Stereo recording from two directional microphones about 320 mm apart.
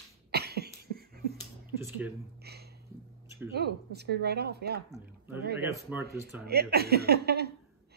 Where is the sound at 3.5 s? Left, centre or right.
Right.